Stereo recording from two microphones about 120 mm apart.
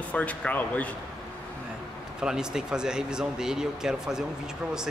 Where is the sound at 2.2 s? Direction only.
5° right (ahead or behind).